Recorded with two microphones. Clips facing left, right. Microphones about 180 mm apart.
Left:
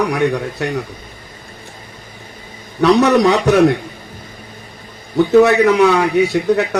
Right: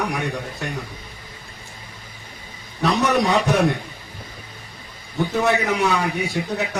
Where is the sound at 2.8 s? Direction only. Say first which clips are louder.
Left 8 dB; 75° left (ahead or behind).